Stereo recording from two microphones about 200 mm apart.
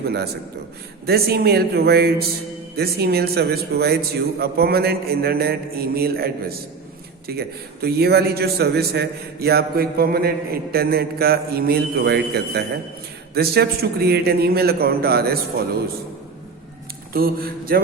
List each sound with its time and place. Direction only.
0.0 s a man's voice: 55° right (ahead or behind)
17.2 s a man's voice: 50° right (ahead or behind)